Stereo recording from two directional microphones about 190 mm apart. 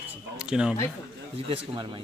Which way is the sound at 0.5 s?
5° right (ahead or behind).